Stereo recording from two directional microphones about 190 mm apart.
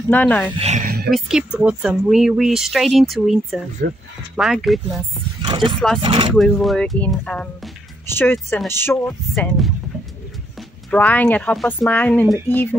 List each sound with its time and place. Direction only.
0.1 s speech: 10° left (ahead or behind)
0.6 s speech: 35° right (ahead or behind)
0.8 s a sound: 55° right (ahead or behind)
1.1 s speech: 5° right (ahead or behind)
5.4 s roaring cats: 25° right (ahead or behind)
6.0 s speech: 25° right (ahead or behind)
6.3 s speech: centre (ahead or behind)
10.9 s speech: 10° left (ahead or behind)